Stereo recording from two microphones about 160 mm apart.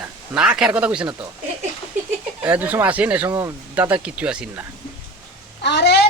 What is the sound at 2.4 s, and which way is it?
Speech, 10° right (ahead or behind).